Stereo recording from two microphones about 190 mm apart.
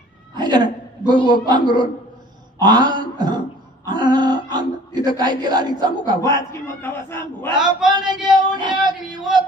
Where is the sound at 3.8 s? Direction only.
20° right (ahead or behind).